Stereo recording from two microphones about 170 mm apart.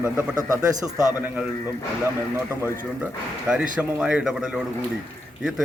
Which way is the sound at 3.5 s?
5° right (ahead or behind).